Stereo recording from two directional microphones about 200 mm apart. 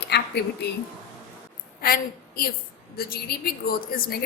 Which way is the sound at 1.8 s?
50° left (ahead or behind).